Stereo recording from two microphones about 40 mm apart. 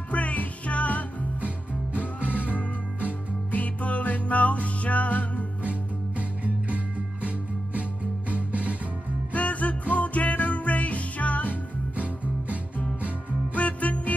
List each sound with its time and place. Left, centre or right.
0.1 s music: left
2.1 s music: right
3.5 s music: left
5.6 s music: right
8.3 s music: right
9.3 s music: left
13.6 s music: left